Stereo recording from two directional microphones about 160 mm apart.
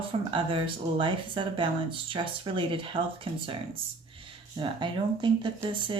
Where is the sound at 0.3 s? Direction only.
35° right (ahead or behind).